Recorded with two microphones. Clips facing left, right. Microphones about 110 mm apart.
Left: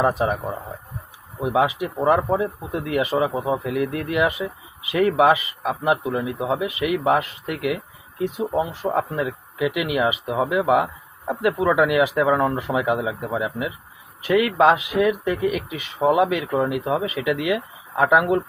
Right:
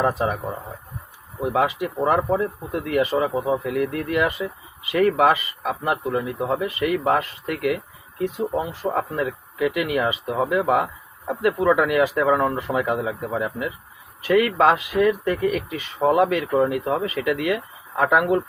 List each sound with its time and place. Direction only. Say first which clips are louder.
0.0 s speech: left 1 dB; 20° left (ahead or behind)
1.4 s speech: left 1 dB; 15° left (ahead or behind)
12.4 s speech: left 1 dB; 5° left (ahead or behind)